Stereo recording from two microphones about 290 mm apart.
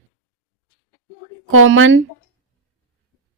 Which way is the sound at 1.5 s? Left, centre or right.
Right.